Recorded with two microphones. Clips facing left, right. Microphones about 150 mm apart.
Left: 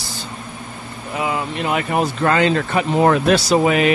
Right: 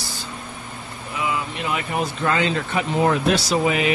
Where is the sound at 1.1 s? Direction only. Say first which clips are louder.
Left 4 dB; 45° left (ahead or behind).